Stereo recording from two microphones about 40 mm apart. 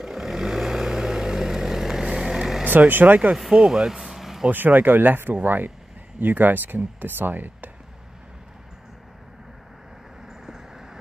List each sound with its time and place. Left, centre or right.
0.0 s vehicle: centre
2.9 s speech: right
3.5 s speech: centre
4.0 s vehicle: centre
4.5 s speech: right
10.2 s vehicle: centre